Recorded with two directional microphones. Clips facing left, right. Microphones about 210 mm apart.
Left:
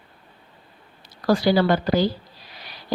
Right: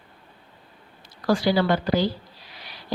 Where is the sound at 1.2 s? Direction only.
35° left (ahead or behind).